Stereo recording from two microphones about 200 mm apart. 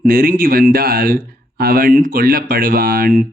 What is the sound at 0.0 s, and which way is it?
Speech, 45° right (ahead or behind).